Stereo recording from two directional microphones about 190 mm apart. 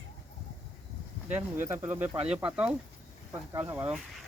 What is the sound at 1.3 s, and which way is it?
Speech, 15° right (ahead or behind).